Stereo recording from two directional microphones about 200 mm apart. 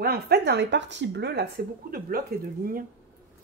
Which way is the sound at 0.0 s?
55° right (ahead or behind).